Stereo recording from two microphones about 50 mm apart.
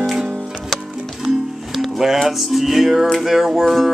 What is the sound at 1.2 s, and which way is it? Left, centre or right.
Music, centre.